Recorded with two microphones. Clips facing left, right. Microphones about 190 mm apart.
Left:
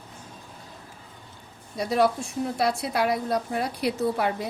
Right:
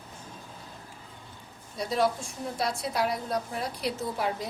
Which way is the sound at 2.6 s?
70° left (ahead or behind).